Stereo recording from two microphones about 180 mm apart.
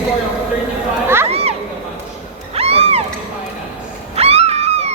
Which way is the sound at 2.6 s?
35° right (ahead or behind).